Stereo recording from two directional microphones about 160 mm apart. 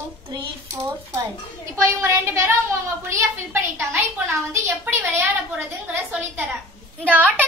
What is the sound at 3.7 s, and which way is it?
A woman's voice, 15° right (ahead or behind).